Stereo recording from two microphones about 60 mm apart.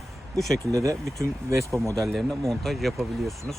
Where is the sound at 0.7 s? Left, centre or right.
Right.